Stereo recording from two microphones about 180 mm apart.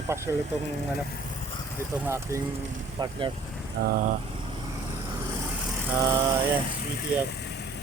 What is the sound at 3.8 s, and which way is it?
Speech, 65° right (ahead or behind).